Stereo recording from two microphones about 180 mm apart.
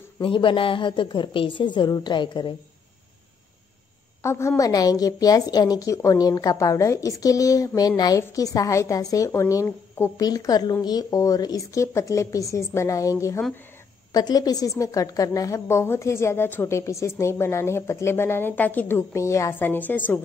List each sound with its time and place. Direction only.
0.2 s a woman's voice: 25° left (ahead or behind)
4.2 s a woman's voice: 15° left (ahead or behind)